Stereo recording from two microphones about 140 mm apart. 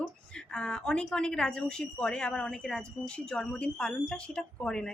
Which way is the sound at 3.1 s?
5° left (ahead or behind).